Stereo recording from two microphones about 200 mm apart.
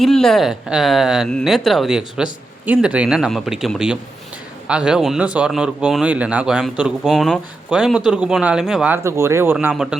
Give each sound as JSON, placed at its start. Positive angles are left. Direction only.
{"t": 0.0, "sound": "speech", "side_deg": 0}